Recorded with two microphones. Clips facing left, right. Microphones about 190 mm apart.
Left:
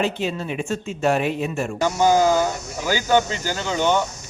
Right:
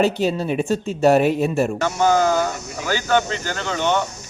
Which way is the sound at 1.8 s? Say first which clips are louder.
Left 3 dB; 10° left (ahead or behind).